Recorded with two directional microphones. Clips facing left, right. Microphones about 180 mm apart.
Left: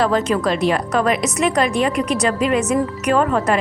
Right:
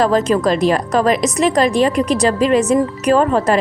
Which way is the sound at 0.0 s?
40° right (ahead or behind).